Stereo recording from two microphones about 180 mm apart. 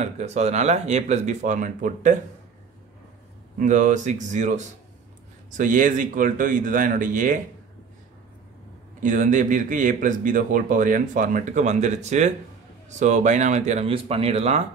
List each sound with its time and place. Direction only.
0.0 s speech: 40° right (ahead or behind)
3.5 s speech: 45° right (ahead or behind)
9.0 s speech: 45° right (ahead or behind)